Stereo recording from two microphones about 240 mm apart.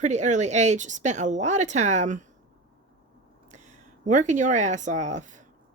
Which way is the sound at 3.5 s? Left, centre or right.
Right.